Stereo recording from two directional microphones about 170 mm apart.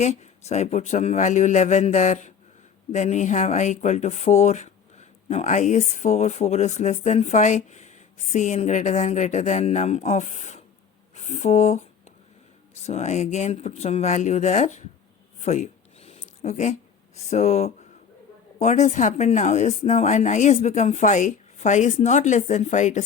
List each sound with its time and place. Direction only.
0.0 s speech: 40° left (ahead or behind)
15.4 s a sound: 45° left (ahead or behind)
17.2 s speech: 40° left (ahead or behind)